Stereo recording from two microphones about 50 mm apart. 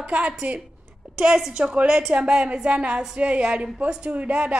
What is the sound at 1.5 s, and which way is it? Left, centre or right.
Speech, right.